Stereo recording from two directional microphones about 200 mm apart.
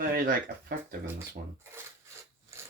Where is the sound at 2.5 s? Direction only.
15° right (ahead or behind).